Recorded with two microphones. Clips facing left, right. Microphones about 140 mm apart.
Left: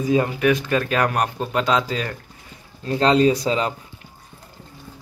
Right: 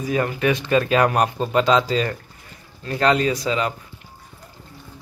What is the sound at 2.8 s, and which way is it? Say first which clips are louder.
Speech: left 3 dB; 30° left (ahead or behind).